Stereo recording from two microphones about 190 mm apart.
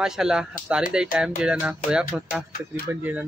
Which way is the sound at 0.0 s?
5° right (ahead or behind).